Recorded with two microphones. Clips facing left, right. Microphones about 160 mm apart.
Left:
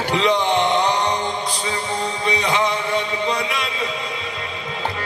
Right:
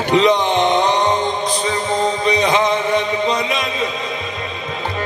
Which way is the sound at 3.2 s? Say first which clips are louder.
Right 4 dB; 20° right (ahead or behind).